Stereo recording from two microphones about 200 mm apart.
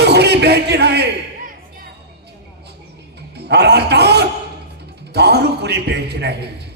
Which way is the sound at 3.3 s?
55° right (ahead or behind).